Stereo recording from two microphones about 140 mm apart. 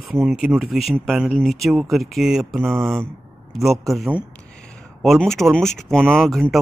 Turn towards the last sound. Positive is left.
turn(degrees=0)  # may be behind; listen again after turning